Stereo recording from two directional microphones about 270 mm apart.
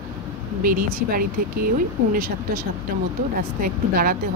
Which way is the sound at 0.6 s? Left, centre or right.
Right.